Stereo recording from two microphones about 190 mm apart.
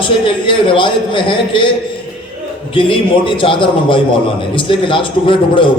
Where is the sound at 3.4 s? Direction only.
25° left (ahead or behind).